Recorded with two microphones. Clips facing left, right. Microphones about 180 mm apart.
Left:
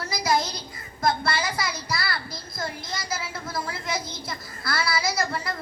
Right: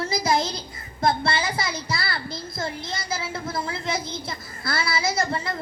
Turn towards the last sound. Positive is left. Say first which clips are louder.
# right 2 dB
turn(degrees=-25)  # may be behind; listen again after turning